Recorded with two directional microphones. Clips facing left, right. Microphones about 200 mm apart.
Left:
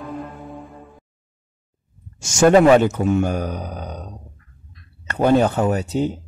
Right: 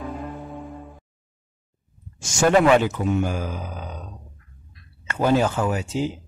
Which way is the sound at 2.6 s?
40° left (ahead or behind).